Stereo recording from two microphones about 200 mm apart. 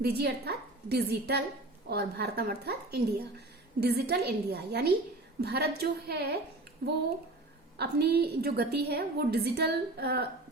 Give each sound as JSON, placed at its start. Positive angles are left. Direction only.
{"t": 0.0, "sound": "a woman's voice", "side_deg": -55}